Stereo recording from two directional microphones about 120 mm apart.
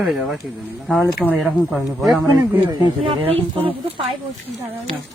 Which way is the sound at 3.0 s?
50° right (ahead or behind).